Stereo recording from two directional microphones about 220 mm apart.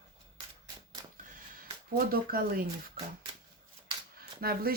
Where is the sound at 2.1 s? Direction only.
40° right (ahead or behind).